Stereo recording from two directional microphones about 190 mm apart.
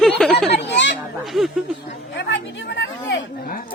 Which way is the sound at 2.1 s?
70° left (ahead or behind).